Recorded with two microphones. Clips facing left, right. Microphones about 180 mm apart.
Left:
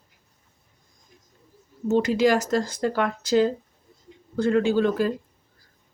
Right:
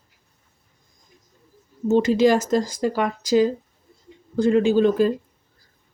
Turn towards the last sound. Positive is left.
turn(degrees=-20)  # may be behind; listen again after turning